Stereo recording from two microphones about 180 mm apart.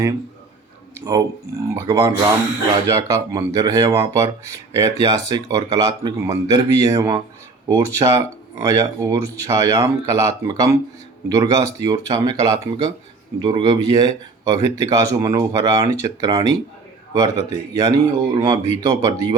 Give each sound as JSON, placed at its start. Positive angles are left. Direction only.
{"t": 0.9, "sound": "speech", "side_deg": -20}